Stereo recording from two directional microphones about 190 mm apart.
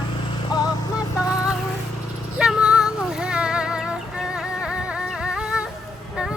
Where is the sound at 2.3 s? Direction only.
5° right (ahead or behind).